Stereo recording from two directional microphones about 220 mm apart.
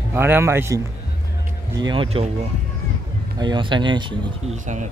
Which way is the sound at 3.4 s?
20° right (ahead or behind).